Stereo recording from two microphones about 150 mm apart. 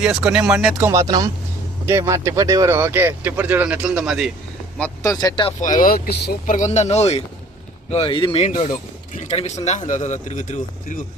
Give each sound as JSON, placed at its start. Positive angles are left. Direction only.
{"t": 0.0, "sound": "speech", "side_deg": -5}
{"t": 0.8, "sound": "speech", "side_deg": -20}
{"t": 5.0, "sound": "speech", "side_deg": 25}
{"t": 5.5, "sound": "speech", "side_deg": 55}
{"t": 8.4, "sound": "a man's voice", "side_deg": 55}